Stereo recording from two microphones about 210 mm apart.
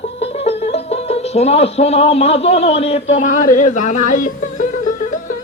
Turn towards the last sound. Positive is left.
turn(degrees=40)  # may be behind; listen again after turning